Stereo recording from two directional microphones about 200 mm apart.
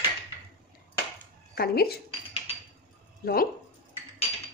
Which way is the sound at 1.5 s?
50° left (ahead or behind).